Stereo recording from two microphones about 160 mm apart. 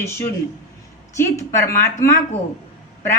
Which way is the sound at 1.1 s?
20° left (ahead or behind).